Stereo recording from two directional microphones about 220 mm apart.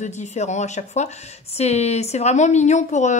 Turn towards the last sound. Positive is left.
turn(degrees=30)  # may be behind; listen again after turning